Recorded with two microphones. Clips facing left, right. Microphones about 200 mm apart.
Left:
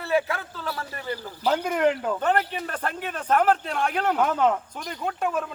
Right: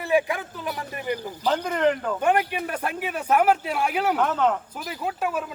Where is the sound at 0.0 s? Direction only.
15° right (ahead or behind).